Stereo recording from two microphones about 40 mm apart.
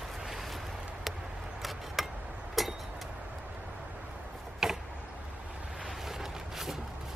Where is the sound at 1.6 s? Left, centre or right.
Centre.